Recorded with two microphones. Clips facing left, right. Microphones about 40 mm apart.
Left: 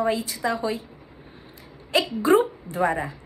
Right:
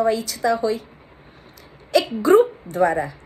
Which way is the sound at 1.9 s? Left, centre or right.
Left.